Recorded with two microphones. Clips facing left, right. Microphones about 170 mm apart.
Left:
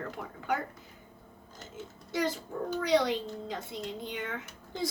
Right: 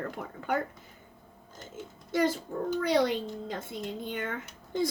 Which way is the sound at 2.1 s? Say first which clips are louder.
Right 4 dB; 50° right (ahead or behind).